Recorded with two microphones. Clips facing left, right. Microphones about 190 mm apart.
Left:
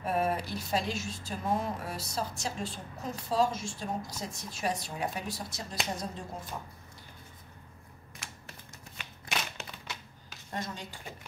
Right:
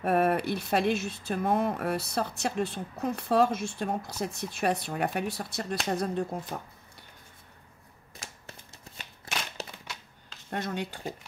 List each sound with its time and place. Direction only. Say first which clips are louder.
0.0 s speech: right 5 dB; 60° right (ahead or behind)
8.2 s typewriter: right 2 dB; 40° right (ahead or behind)
9.6 s a sound: right 5 dB; 35° right (ahead or behind)
10.5 s speech: right 6 dB; 65° right (ahead or behind)